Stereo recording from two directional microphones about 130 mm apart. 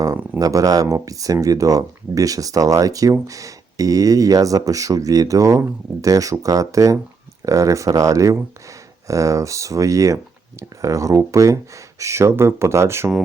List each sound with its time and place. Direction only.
0.3 s speech: 25° right (ahead or behind)